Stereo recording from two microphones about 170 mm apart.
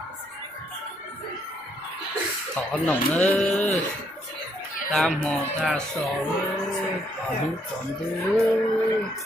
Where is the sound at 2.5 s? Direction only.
10° left (ahead or behind).